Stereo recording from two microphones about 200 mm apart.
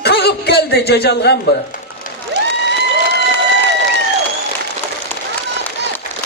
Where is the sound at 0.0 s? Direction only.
55° left (ahead or behind).